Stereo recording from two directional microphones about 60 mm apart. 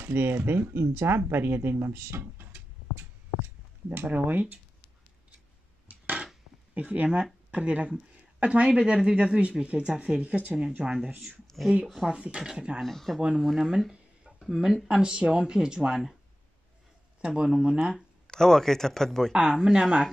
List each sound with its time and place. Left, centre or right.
0.0 s speech: right
2.3 s a sound: right
3.9 s speech: right
6.7 s speech: right
11.6 s speech: centre
12.1 s speech: centre
12.8 s speech: centre
13.4 s speech: centre
17.2 s speech: centre
18.2 s speech: centre
19.6 s speech: centre